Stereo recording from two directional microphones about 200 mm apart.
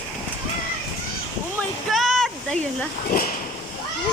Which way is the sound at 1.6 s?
Centre (ahead or behind).